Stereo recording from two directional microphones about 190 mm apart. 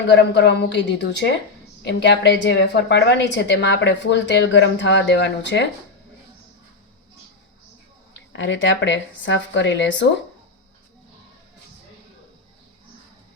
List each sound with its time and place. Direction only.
0.1 s a woman's voice: 65° left (ahead or behind)
8.3 s a woman's voice: 75° left (ahead or behind)